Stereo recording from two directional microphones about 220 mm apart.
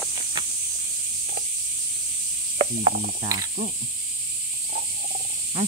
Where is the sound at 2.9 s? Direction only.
45° right (ahead or behind).